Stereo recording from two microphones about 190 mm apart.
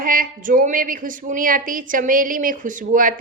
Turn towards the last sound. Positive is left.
turn(degrees=-45)  # may be behind; listen again after turning